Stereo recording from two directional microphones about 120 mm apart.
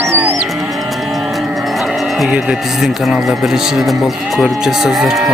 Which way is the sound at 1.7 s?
Centre (ahead or behind).